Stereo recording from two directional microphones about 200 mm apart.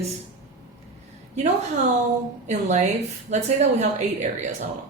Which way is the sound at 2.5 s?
35° right (ahead or behind).